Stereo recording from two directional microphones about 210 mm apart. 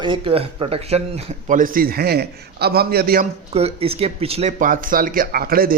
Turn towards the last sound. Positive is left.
turn(degrees=-45)  # may be behind; listen again after turning